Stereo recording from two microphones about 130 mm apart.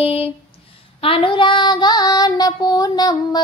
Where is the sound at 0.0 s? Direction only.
50° left (ahead or behind).